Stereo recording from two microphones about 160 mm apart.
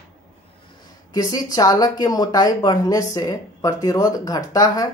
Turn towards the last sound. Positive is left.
turn(degrees=20)  # may be behind; listen again after turning